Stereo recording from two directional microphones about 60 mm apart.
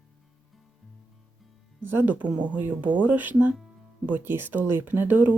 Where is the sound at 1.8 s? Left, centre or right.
Right.